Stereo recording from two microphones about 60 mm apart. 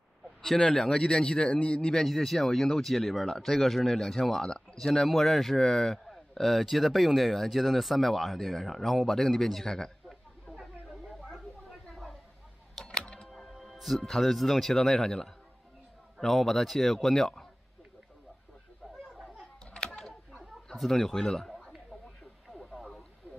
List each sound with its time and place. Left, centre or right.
0.4 s speech: centre
2.0 s speech: centre
10.6 s a sound: centre
13.0 s music: centre
13.3 s speech: centre
20.7 s speech: centre
22.5 s radio: centre